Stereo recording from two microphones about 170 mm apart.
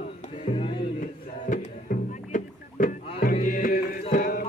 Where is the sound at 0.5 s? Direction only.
35° left (ahead or behind).